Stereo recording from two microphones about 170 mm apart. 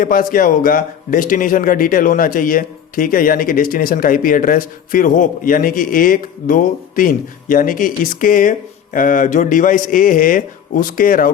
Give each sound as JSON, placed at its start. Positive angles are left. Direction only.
{"t": 0.0, "sound": "speech", "side_deg": 55}